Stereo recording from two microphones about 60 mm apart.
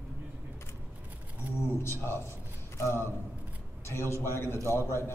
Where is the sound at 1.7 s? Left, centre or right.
Left.